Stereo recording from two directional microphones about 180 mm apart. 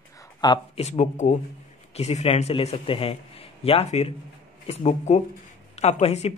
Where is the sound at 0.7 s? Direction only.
40° left (ahead or behind).